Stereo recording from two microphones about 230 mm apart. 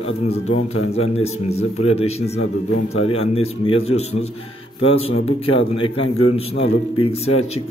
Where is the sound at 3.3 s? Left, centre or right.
Left.